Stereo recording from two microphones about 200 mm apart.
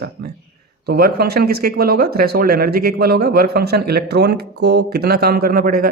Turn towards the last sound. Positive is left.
turn(degrees=-50)  # may be behind; listen again after turning